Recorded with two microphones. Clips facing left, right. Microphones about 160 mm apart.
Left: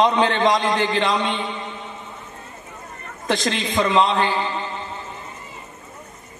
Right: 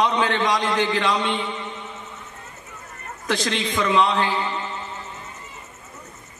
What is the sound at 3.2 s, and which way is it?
Speech, 20° left (ahead or behind).